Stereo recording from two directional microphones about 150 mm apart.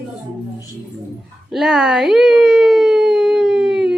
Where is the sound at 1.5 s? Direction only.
5° right (ahead or behind).